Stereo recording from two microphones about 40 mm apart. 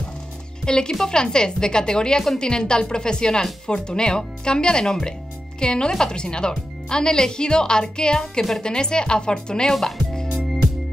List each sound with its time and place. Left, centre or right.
0.7 s a woman's voice: centre
9.8 s music: centre